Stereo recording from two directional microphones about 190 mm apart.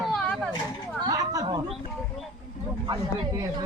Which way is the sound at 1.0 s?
20° right (ahead or behind).